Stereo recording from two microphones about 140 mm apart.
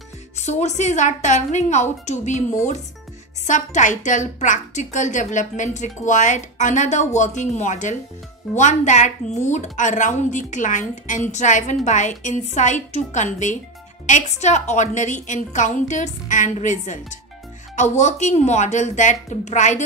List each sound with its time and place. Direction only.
0.4 s a woman's voice: 55° left (ahead or behind)
3.4 s a woman's voice: 60° left (ahead or behind)